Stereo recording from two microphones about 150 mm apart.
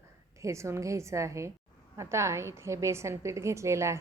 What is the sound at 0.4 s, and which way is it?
A woman's voice, 20° right (ahead or behind).